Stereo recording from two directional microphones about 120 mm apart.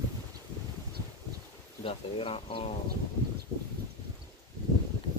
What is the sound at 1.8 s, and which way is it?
Speech, 55° left (ahead or behind).